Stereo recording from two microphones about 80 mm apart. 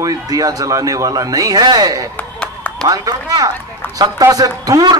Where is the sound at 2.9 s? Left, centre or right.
Right.